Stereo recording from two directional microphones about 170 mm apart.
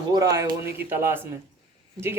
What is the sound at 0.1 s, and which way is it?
Speech, 20° right (ahead or behind).